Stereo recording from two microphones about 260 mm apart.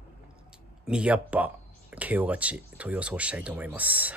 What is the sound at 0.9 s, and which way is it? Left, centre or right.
Speech, centre.